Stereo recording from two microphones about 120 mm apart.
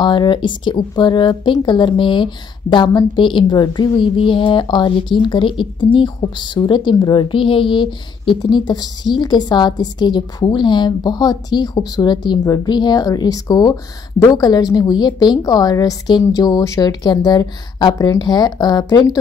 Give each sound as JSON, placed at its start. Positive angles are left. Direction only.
{"t": 0.0, "sound": "a woman's voice", "side_deg": 40}